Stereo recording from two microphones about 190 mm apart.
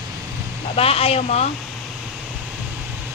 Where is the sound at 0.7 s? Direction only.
30° left (ahead or behind).